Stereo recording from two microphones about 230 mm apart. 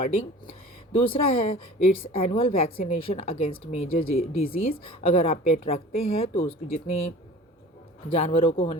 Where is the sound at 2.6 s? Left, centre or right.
Left.